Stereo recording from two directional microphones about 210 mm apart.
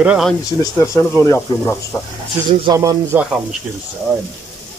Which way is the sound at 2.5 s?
20° right (ahead or behind).